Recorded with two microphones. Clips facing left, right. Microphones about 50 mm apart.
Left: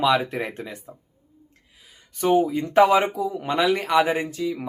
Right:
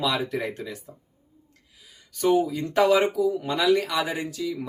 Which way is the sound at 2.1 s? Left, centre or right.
Left.